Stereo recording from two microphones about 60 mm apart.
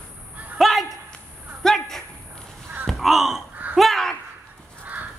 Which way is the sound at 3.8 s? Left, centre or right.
Centre.